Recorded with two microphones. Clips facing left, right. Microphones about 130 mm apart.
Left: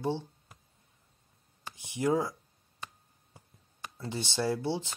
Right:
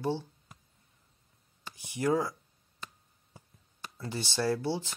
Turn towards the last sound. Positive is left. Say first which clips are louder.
# right 1 dB
turn(degrees=20)  # may be behind; listen again after turning